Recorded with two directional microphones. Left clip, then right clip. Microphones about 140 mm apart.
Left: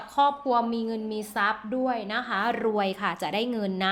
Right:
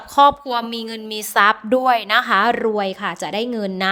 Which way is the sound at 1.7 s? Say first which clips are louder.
Right 12 dB; 70° right (ahead or behind).